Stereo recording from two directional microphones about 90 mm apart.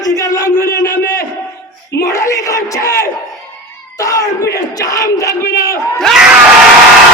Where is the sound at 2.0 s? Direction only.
35° left (ahead or behind).